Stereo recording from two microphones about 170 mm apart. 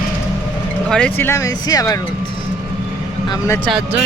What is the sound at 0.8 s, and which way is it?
Speech, 5° left (ahead or behind).